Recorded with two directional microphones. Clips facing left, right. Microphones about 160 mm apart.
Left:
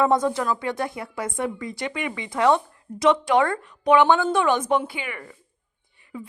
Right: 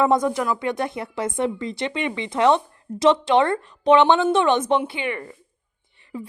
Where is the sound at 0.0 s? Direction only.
15° right (ahead or behind).